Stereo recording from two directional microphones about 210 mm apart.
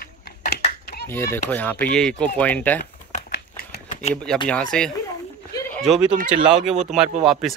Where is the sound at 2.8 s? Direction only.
35° left (ahead or behind).